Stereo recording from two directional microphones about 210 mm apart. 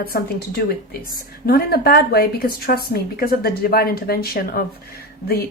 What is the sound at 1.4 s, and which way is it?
Speech, 45° left (ahead or behind).